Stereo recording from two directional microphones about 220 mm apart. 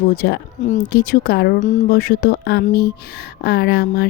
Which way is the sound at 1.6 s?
35° left (ahead or behind).